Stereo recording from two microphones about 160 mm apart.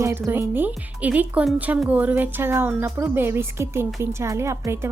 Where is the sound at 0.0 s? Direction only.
15° right (ahead or behind).